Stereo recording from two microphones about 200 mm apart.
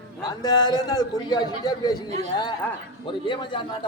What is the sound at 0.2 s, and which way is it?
A man's voice, 20° left (ahead or behind).